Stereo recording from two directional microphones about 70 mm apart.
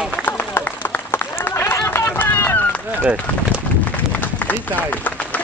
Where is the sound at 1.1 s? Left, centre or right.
Left.